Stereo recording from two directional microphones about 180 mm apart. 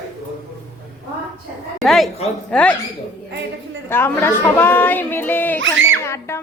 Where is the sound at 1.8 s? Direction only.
Centre (ahead or behind).